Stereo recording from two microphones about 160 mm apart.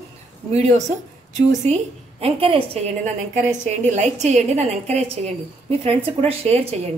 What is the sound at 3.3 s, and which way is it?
A woman's voice, 50° right (ahead or behind).